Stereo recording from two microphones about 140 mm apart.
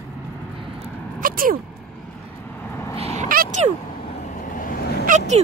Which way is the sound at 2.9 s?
45° right (ahead or behind).